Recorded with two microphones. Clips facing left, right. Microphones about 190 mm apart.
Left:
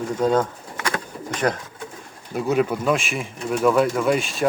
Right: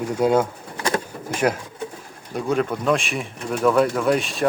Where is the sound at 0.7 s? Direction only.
30° right (ahead or behind).